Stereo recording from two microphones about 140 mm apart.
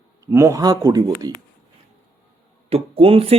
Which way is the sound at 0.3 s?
20° right (ahead or behind).